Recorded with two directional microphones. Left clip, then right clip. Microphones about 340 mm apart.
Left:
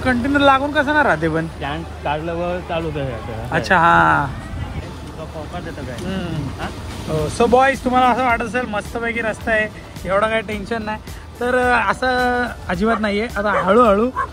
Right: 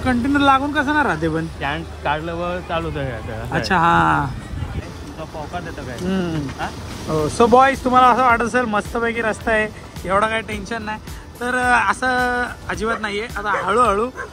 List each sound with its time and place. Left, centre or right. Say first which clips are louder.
0.0 s speech: left 2 dB; centre
6.0 s speech: right 5 dB; right
7.3 s speech: right 1 dB; right